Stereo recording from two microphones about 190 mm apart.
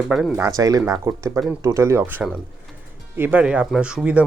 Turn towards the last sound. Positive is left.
turn(degrees=-5)  # may be behind; listen again after turning